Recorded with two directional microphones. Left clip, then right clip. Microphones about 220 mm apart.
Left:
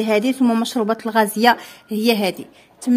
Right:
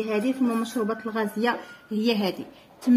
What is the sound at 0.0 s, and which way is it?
Speech, 50° left (ahead or behind).